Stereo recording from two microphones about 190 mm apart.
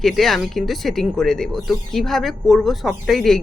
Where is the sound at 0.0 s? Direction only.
Centre (ahead or behind).